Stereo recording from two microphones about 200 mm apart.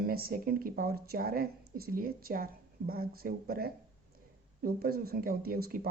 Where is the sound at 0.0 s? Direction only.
50° right (ahead or behind).